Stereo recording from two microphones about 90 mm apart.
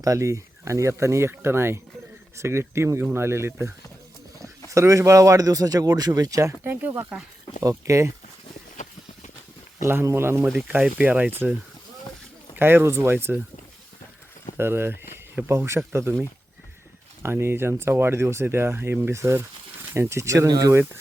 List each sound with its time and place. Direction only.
0.0 s speech: 35° right (ahead or behind)
4.7 s speech: 35° right (ahead or behind)
6.5 s speech: 20° right (ahead or behind)
7.6 s speech: 35° right (ahead or behind)
9.8 s speech: 30° right (ahead or behind)
10.7 s speech: 15° right (ahead or behind)
12.5 s speech: 25° right (ahead or behind)
14.6 s speech: 25° right (ahead or behind)
17.2 s speech: 25° right (ahead or behind)
20.5 s speech: 45° right (ahead or behind)